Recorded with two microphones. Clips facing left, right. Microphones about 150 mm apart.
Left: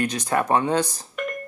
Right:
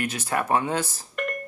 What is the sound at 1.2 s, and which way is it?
Telephone dialing, centre (ahead or behind).